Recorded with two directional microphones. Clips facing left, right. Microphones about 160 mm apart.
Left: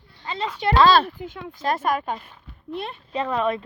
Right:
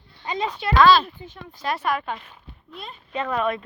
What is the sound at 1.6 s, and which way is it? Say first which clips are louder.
Speech: left 2 dB; 45° left (ahead or behind).